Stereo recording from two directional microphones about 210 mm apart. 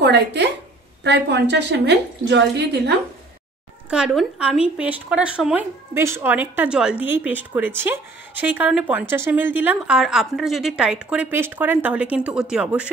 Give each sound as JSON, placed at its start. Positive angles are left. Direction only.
{"t": 0.0, "sound": "a woman's voice", "side_deg": -55}
{"t": 3.9, "sound": "speech", "side_deg": 0}